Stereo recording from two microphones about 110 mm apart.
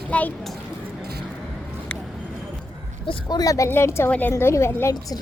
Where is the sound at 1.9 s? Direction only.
10° left (ahead or behind).